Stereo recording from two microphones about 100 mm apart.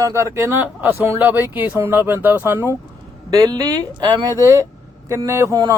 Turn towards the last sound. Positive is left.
turn(degrees=-40)  # may be behind; listen again after turning